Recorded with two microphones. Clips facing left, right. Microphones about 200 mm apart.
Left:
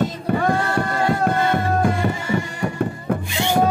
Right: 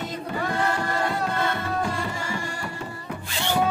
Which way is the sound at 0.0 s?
55° left (ahead or behind).